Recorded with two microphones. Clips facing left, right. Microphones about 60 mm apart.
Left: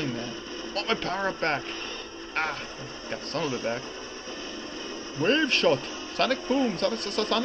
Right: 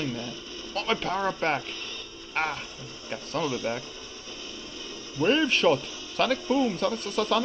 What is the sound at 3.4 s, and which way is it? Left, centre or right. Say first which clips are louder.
Speech: even; left.